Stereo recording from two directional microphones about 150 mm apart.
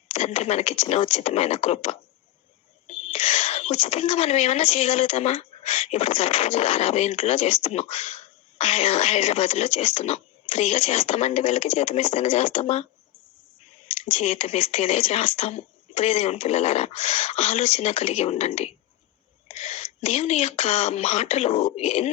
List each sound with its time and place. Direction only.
0.1 s speech: 45° left (ahead or behind)
13.9 s speech: 45° left (ahead or behind)